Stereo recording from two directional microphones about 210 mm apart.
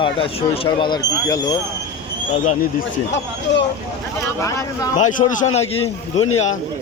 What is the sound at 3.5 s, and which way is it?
Speech, 60° left (ahead or behind).